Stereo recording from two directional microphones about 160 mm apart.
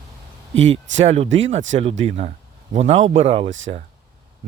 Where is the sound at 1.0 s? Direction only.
40° right (ahead or behind).